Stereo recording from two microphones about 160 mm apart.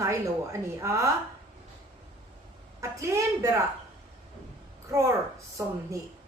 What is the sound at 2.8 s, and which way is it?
Speech, 20° right (ahead or behind).